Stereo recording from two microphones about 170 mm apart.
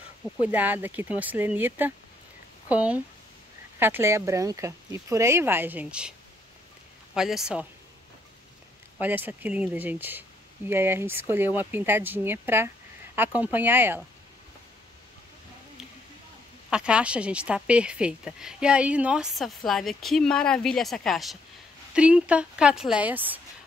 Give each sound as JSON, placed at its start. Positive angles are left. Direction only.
{"t": 0.2, "sound": "speech", "side_deg": -10}
{"t": 7.2, "sound": "speech", "side_deg": -5}
{"t": 8.9, "sound": "speech", "side_deg": -10}
{"t": 16.7, "sound": "speech", "side_deg": -5}